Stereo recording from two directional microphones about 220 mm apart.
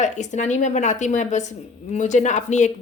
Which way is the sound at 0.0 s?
35° left (ahead or behind).